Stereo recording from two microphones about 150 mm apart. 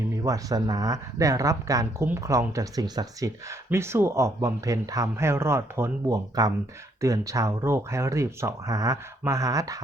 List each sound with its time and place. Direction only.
0.3 s speech: 25° right (ahead or behind)